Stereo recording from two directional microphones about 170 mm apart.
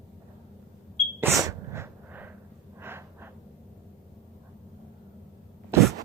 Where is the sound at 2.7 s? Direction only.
15° right (ahead or behind).